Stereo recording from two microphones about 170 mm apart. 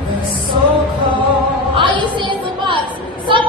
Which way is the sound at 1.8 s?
30° right (ahead or behind).